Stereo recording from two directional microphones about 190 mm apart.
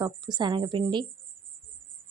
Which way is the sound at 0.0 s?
20° right (ahead or behind).